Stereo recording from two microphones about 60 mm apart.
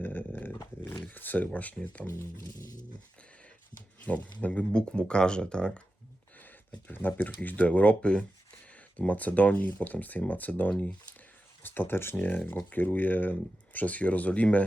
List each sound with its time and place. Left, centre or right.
0.0 s dog: left
1.1 s speech: left
4.0 s speech: left
6.4 s a sound: left
7.2 s speech: left
11.6 s speech: left